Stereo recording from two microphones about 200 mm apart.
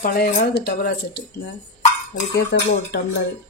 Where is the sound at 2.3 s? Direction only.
55° left (ahead or behind).